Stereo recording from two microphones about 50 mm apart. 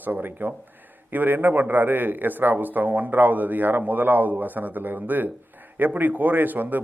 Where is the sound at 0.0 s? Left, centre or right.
Right.